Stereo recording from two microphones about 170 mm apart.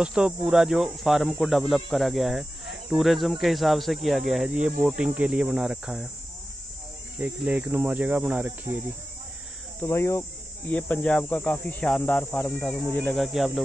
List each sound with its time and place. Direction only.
0.0 s speech: 5° right (ahead or behind)
7.2 s speech: 5° right (ahead or behind)
9.8 s speech: 15° left (ahead or behind)
10.7 s speech: 5° left (ahead or behind)